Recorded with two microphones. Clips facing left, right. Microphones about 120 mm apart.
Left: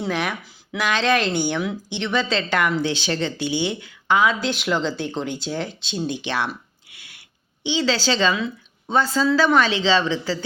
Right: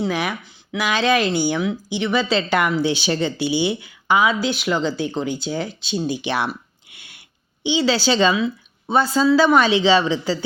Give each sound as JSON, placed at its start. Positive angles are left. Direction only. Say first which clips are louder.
{"t": 0.0, "sound": "speech", "louder": "right 2 dB", "side_deg": -5}
{"t": 6.9, "sound": "a sound", "louder": "right 1 dB", "side_deg": -25}
{"t": 7.6, "sound": "speech", "louder": "right 3 dB", "side_deg": -10}